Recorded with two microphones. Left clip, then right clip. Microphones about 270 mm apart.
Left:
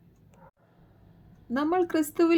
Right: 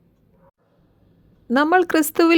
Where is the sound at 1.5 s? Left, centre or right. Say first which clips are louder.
Right 10 dB; right.